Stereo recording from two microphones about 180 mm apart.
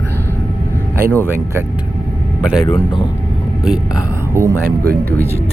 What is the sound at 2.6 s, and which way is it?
Speech, 25° left (ahead or behind).